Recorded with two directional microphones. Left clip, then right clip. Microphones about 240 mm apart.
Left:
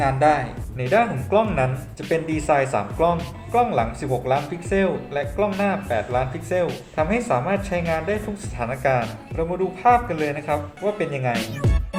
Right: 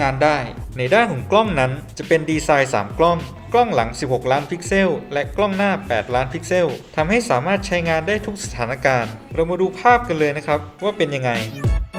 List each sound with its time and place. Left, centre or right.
0.0 s speech: right